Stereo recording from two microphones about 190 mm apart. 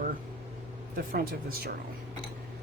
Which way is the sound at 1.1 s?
55° right (ahead or behind).